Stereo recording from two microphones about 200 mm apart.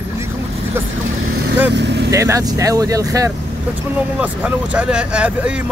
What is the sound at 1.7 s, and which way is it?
Speech, 60° right (ahead or behind).